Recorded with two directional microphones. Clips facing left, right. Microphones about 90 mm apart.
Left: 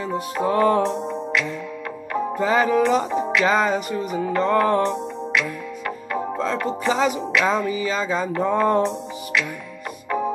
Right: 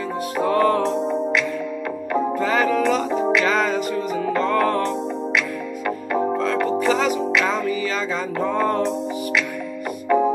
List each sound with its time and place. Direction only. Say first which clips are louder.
0.5 s music: even; 20° left (ahead or behind)
2.3 s music: left 3 dB; 20° left (ahead or behind)
6.4 s music: right 3 dB; 20° left (ahead or behind)